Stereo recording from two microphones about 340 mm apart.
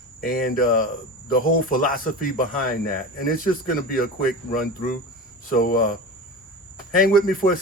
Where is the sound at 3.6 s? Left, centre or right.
Left.